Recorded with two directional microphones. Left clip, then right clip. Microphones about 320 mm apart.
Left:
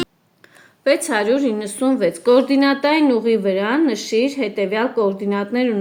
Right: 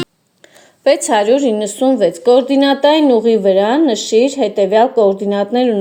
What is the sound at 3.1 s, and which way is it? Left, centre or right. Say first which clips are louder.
Speech: right 6 dB; right.